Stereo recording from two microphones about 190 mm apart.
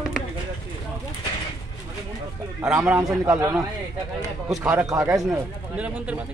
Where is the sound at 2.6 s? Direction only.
15° right (ahead or behind).